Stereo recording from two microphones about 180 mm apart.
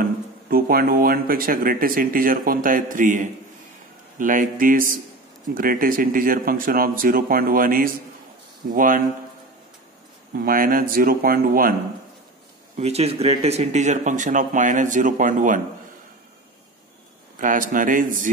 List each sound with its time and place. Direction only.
0.0 s speech: 55° right (ahead or behind)
10.3 s speech: 50° right (ahead or behind)
12.7 s speech: 35° right (ahead or behind)
17.4 s speech: 50° right (ahead or behind)